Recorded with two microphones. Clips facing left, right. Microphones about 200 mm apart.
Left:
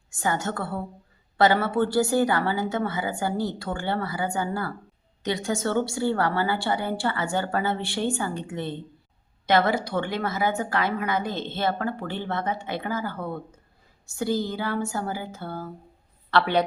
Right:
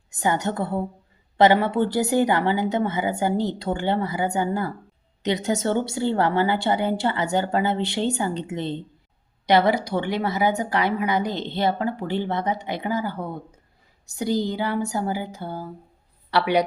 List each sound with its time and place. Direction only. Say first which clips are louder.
0.1 s a woman's voice: right 3 dB; 20° right (ahead or behind)